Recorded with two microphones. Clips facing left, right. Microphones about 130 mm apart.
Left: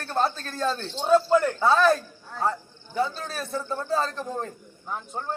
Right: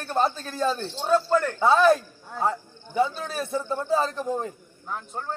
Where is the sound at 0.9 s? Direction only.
15° left (ahead or behind).